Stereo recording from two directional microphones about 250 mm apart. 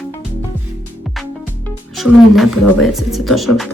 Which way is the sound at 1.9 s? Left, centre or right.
Centre.